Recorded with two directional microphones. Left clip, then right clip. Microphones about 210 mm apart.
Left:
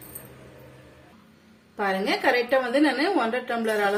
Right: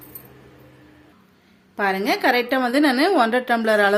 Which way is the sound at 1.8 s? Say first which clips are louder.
Right 4 dB; 50° right (ahead or behind).